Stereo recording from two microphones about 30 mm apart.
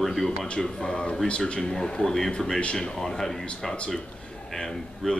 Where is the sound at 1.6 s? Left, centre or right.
Centre.